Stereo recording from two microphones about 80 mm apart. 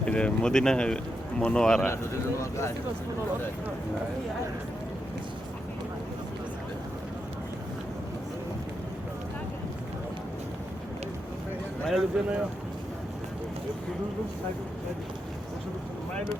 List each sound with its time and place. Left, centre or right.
0.0 s speech: centre
11.9 s speech: centre